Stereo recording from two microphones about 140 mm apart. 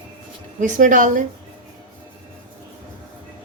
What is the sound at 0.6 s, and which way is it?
Speech, 65° right (ahead or behind).